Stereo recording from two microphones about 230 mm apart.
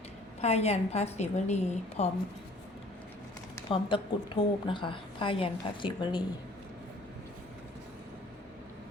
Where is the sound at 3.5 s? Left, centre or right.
Left.